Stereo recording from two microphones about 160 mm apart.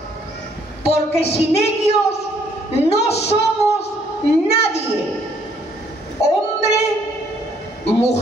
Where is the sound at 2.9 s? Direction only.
40° left (ahead or behind).